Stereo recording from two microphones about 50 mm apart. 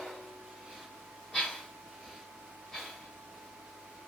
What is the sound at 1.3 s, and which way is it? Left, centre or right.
Breathing, centre.